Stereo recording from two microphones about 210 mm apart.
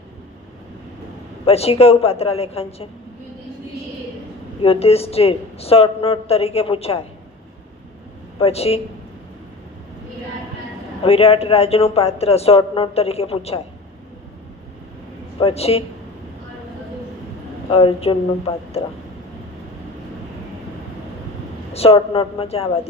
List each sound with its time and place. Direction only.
1.5 s a man's voice: 30° left (ahead or behind)
4.6 s a man's voice: 30° left (ahead or behind)
8.4 s a man's voice: 30° left (ahead or behind)
11.0 s a man's voice: 25° left (ahead or behind)
15.4 s a man's voice: 25° left (ahead or behind)
17.7 s a man's voice: 25° left (ahead or behind)
21.7 s a man's voice: 30° left (ahead or behind)